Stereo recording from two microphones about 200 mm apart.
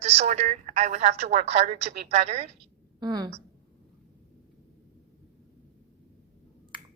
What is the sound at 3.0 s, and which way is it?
Speech, 20° right (ahead or behind).